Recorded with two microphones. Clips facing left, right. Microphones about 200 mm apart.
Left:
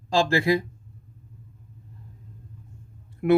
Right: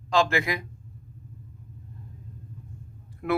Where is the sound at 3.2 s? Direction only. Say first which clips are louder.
Left 7 dB; 20° left (ahead or behind).